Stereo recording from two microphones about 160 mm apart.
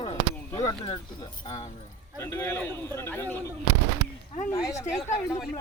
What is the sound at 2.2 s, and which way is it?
A man's voice, 15° left (ahead or behind).